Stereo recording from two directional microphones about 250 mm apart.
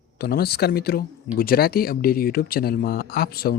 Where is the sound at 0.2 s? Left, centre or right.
Left.